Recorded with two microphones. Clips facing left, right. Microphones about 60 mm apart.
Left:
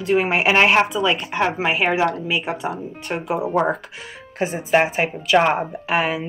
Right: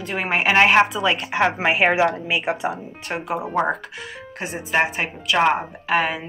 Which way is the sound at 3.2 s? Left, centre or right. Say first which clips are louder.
Left 2 dB; centre.